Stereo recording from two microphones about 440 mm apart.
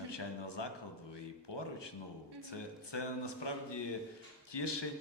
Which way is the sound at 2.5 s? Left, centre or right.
Left.